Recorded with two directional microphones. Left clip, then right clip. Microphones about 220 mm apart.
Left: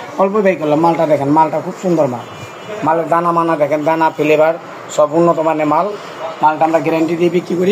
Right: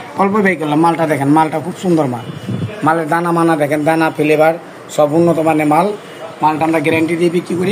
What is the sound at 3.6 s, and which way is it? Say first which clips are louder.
A man's voice: left 1 dB; 30° right (ahead or behind).